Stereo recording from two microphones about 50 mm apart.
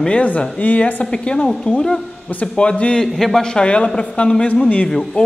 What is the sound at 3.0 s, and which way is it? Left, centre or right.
A man's voice, centre.